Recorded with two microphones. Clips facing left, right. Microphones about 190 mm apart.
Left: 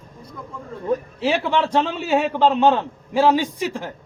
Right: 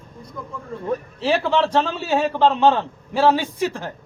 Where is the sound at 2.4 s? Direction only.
15° left (ahead or behind).